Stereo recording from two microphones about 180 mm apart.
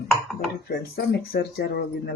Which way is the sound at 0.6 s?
65° left (ahead or behind).